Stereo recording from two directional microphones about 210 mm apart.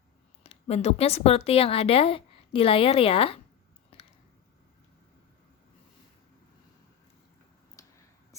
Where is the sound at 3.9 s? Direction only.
25° left (ahead or behind).